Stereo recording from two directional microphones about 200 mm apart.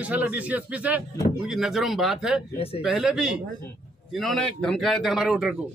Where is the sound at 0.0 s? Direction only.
5° right (ahead or behind).